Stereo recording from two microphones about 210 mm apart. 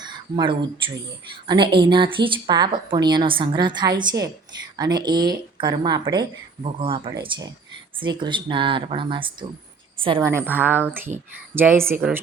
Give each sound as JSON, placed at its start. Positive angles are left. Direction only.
{"t": 0.0, "sound": "a sound", "side_deg": -20}
{"t": 1.5, "sound": "speech", "side_deg": -25}
{"t": 10.2, "sound": "speech", "side_deg": -15}